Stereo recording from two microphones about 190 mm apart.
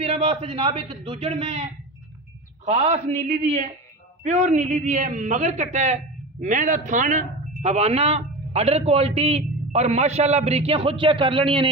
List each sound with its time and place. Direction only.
0.0 s speech: 30° right (ahead or behind)